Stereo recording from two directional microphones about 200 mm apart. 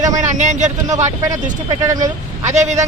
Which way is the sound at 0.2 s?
40° right (ahead or behind).